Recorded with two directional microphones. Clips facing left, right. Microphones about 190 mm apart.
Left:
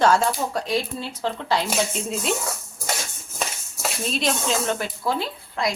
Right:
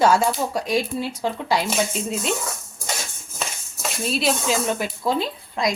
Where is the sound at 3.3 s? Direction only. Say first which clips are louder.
Left 1 dB; centre (ahead or behind).